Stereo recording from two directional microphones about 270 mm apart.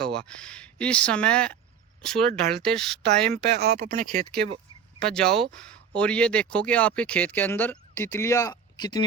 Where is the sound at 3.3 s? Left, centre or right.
Right.